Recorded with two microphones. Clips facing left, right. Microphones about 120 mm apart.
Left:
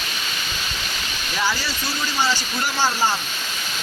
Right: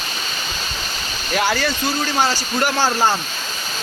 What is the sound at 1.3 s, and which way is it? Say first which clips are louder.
Speech: right 5 dB; 55° right (ahead or behind).